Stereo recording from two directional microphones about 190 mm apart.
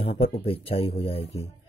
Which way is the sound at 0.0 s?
30° left (ahead or behind).